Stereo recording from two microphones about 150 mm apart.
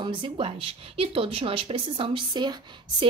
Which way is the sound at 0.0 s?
35° right (ahead or behind).